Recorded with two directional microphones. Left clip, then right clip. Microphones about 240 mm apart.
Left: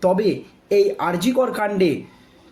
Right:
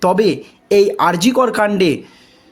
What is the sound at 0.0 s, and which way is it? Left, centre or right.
Speech, right.